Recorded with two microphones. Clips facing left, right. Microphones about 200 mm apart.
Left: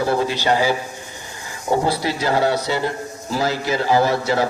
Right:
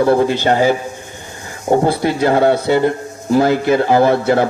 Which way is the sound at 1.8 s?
55° right (ahead or behind).